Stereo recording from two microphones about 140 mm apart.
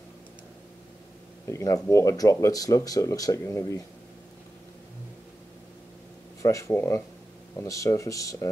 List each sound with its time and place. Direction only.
1.5 s speech: 25° left (ahead or behind)
6.4 s speech: 20° left (ahead or behind)